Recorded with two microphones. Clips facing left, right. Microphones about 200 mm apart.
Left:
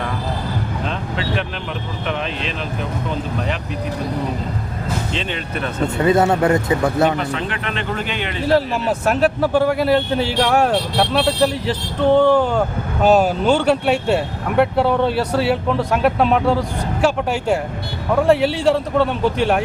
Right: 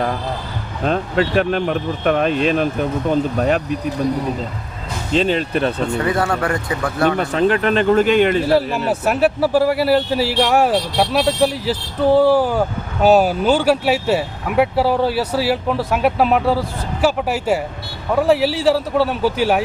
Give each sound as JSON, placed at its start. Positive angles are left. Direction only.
{"t": 0.9, "sound": "speech", "side_deg": -50}
{"t": 5.1, "sound": "speech", "side_deg": -35}
{"t": 6.0, "sound": "speech", "side_deg": 20}
{"t": 7.2, "sound": "speech", "side_deg": -40}
{"t": 8.4, "sound": "speech", "side_deg": -5}